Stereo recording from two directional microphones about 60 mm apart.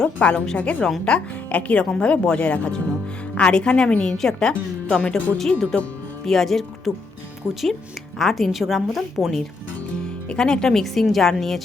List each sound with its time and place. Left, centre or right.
0.0 s speech: left
1.1 s a woman's voice: centre
1.5 s a woman's voice: left; by 9.4 s centre
10.2 s a woman's voice: centre